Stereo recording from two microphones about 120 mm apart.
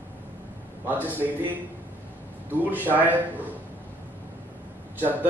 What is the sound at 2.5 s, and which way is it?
Speech, 15° right (ahead or behind).